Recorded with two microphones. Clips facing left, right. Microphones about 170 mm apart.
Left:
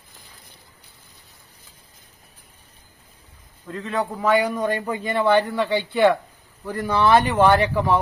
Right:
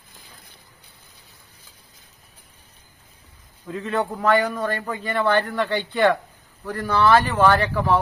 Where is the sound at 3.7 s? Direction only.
5° right (ahead or behind).